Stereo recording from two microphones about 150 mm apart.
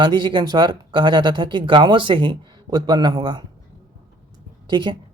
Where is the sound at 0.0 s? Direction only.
30° right (ahead or behind).